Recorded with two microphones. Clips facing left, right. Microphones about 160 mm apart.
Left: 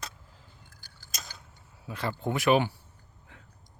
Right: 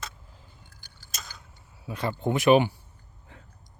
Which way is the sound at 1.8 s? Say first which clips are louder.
Right 3 dB; 20° right (ahead or behind).